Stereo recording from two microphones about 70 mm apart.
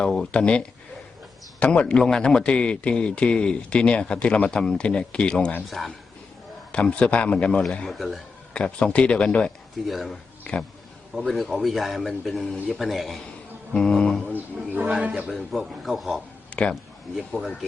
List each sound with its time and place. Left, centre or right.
0.3 s a man's voice: centre
6.7 s a man's voice: centre
7.9 s a man's voice: centre
8.5 s a man's voice: centre
9.8 s a man's voice: centre
10.5 s a man's voice: centre
11.1 s a man's voice: centre
13.7 s mantra: centre
14.3 s a sound: right
15.3 s a man's voice: centre
16.5 s a sound: centre
17.2 s a man's voice: centre